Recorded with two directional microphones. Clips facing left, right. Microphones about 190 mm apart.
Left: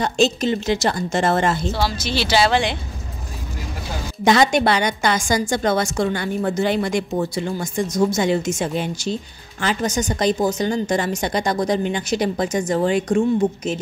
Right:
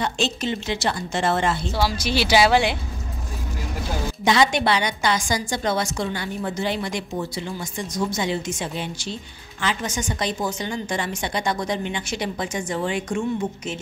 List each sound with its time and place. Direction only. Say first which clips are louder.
0.0 s a woman's voice: left 6 dB; 40° left (ahead or behind)
1.7 s speech: left 1 dB; 10° right (ahead or behind)
4.2 s a woman's voice: left 4 dB; 45° left (ahead or behind)